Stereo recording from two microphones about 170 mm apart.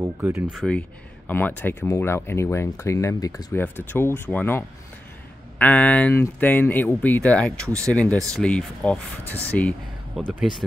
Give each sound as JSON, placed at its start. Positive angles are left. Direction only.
{"t": 0.0, "sound": "speech", "side_deg": -15}
{"t": 0.5, "sound": "speech", "side_deg": 0}